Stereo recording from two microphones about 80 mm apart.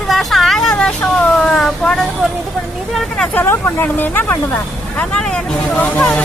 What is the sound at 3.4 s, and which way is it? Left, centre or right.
Speech, left.